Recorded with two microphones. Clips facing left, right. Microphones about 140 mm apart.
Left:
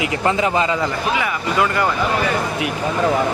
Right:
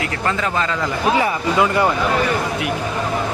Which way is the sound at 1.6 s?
20° right (ahead or behind).